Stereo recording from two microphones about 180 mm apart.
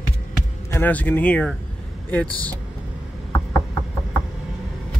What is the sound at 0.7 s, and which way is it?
Speech, 10° left (ahead or behind).